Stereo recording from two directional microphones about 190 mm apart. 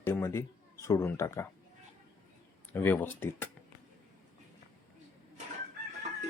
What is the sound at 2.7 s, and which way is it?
Speech, 10° left (ahead or behind).